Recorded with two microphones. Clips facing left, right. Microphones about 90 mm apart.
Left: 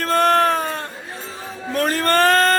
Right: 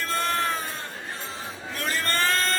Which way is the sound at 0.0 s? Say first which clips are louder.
Left 10 dB; 60° left (ahead or behind).